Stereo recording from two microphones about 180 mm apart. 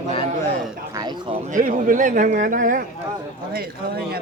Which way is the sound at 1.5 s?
45° right (ahead or behind).